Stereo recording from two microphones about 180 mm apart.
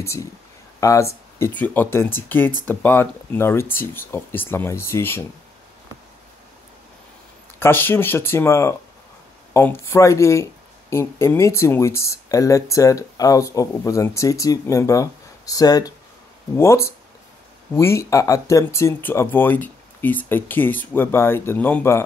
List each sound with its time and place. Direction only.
0.0 s speech: 15° left (ahead or behind)
7.5 s speech: 10° left (ahead or behind)